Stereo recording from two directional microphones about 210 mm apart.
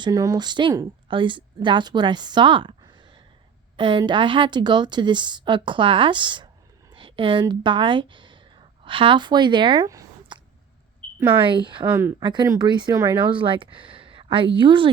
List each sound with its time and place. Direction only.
0.0 s a woman's voice: 15° right (ahead or behind)
11.9 s speech: 10° right (ahead or behind)
12.2 s a woman's voice: 20° right (ahead or behind)